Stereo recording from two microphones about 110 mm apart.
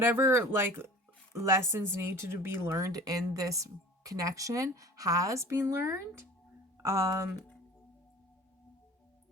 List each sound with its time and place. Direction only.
0.0 s speech: 20° right (ahead or behind)